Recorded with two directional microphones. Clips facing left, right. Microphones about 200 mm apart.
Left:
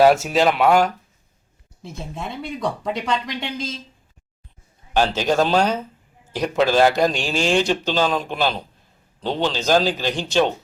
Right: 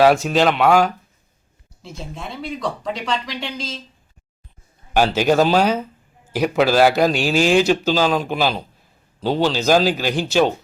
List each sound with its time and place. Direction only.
0.0 s speech: 5° left (ahead or behind)
1.8 s speech: 55° left (ahead or behind)
4.9 s a man's voice: 10° right (ahead or behind)